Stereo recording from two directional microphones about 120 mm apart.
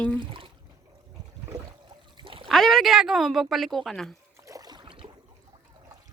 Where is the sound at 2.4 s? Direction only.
Centre (ahead or behind).